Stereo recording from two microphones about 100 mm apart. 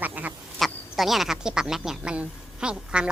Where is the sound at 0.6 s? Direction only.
Centre (ahead or behind).